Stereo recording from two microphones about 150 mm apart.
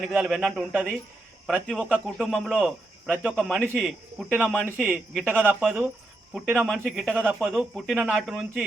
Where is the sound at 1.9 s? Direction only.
5° right (ahead or behind).